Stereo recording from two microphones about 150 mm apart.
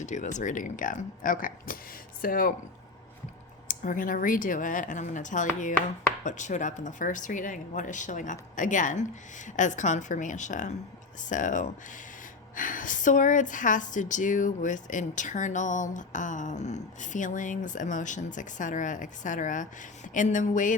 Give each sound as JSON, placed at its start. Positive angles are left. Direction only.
{"t": 0.0, "sound": "speech", "side_deg": 55}
{"t": 3.7, "sound": "speech", "side_deg": 60}